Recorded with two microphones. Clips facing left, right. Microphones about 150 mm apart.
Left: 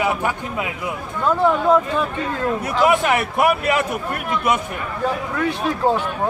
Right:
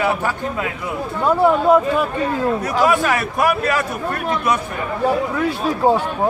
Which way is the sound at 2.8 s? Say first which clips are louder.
Left 2 dB; 20° left (ahead or behind).